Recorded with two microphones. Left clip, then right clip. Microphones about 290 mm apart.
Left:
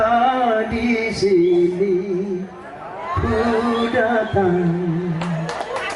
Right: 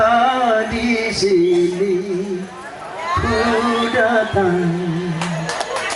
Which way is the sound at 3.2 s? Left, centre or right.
Centre.